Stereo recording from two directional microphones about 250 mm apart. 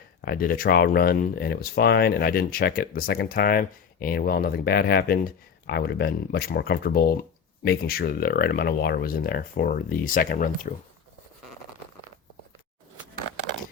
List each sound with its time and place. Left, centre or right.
0.2 s speech: left